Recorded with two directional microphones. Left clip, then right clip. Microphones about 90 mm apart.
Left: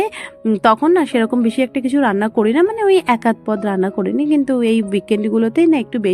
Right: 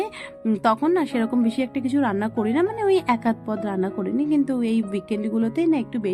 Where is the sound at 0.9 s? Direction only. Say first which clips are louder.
Left 7 dB; 55° left (ahead or behind).